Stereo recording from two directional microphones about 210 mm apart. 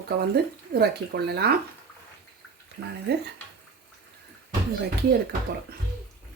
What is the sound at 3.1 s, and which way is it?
Speech, 50° right (ahead or behind).